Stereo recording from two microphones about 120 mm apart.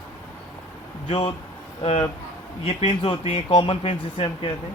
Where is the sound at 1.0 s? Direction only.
55° left (ahead or behind).